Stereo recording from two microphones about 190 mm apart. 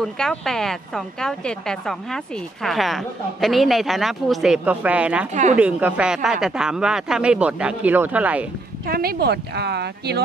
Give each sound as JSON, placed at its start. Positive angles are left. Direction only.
{"t": 0.0, "sound": "speech", "side_deg": 5}
{"t": 5.3, "sound": "speech", "side_deg": -40}
{"t": 5.6, "sound": "speech", "side_deg": -10}
{"t": 8.8, "sound": "speech", "side_deg": -50}